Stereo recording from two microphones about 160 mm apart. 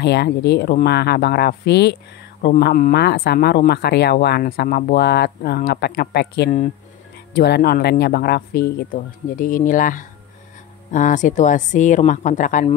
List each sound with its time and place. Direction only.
0.0 s speech: 90° left
2.6 s speech: 75° left (ahead or behind); by 12.6 s 50° left (ahead or behind)